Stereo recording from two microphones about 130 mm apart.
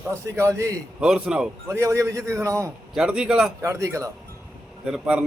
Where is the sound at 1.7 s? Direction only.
20° right (ahead or behind).